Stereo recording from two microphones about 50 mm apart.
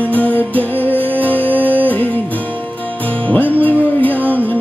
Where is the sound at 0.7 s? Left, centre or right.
Right.